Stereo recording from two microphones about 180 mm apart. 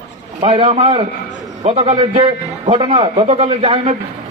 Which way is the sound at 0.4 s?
30° right (ahead or behind).